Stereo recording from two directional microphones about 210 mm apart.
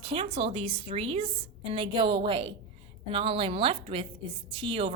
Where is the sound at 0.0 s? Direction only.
25° right (ahead or behind).